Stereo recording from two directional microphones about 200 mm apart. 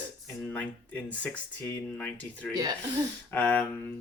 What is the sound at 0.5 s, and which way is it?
Speech, 5° left (ahead or behind).